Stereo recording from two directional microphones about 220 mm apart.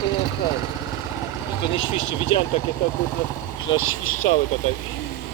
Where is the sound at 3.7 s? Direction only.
70° left (ahead or behind).